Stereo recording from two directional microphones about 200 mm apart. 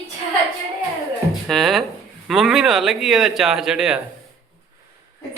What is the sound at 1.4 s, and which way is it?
Speech, centre (ahead or behind).